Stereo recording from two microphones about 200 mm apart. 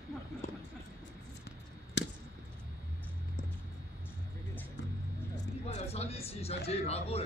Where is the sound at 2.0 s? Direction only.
65° left (ahead or behind).